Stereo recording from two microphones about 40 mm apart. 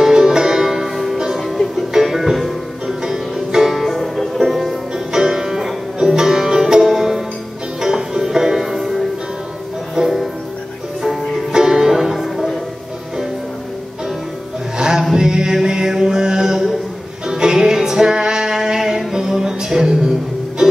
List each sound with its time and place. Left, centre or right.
0.0 s music: centre
1.4 s music: centre
2.9 s music: centre
11.5 s music: centre
14.8 s music: centre